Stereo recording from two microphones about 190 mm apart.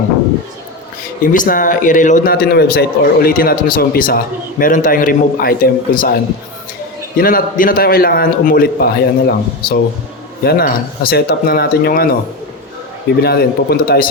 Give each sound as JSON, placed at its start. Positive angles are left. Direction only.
{"t": 1.3, "sound": "a man's voice", "side_deg": 45}
{"t": 7.2, "sound": "a man's voice", "side_deg": 50}
{"t": 13.2, "sound": "speech", "side_deg": 55}